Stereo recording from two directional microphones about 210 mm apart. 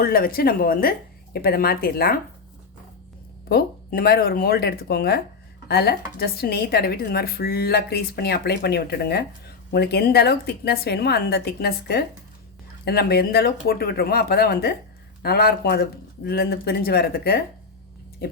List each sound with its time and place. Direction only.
0.0 s a woman's voice: 45° left (ahead or behind)
3.5 s a woman's voice: 45° left (ahead or behind)